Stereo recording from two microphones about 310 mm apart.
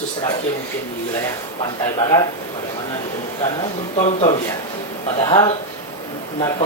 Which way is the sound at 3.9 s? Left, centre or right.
Left.